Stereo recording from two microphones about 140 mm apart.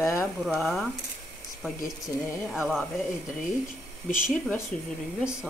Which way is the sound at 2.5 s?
Centre (ahead or behind).